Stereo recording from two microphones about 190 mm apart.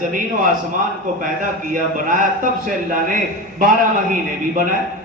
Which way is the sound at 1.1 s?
45° right (ahead or behind).